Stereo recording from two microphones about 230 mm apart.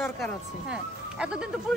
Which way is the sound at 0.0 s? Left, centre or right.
Centre.